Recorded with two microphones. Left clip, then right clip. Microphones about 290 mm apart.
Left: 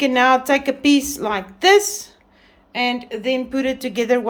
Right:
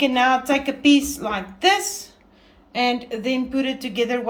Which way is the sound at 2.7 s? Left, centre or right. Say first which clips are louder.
Even; centre.